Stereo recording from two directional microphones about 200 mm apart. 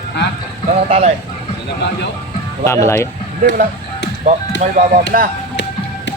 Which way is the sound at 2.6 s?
15° left (ahead or behind).